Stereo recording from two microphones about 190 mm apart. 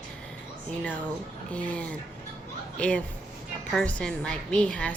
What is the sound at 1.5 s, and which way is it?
A woman's voice, 5° left (ahead or behind).